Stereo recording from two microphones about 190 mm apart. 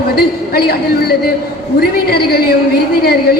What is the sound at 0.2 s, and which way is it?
A man's voice, 55° left (ahead or behind).